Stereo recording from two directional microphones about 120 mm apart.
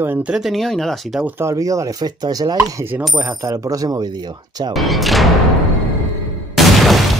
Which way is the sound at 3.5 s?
30° right (ahead or behind).